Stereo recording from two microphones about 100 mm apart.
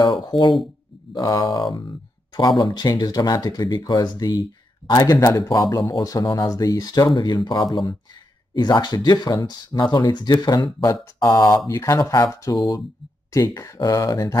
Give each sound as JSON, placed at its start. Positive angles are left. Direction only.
{"t": 0.0, "sound": "speech", "side_deg": 50}
{"t": 5.0, "sound": "speech", "side_deg": 35}
{"t": 7.2, "sound": "speech", "side_deg": 50}